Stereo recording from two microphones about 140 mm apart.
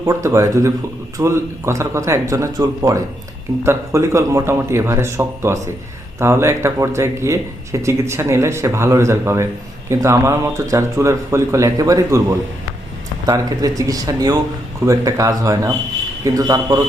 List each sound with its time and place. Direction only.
0.0 s speech: 20° right (ahead or behind)
13.2 s speech: 25° right (ahead or behind)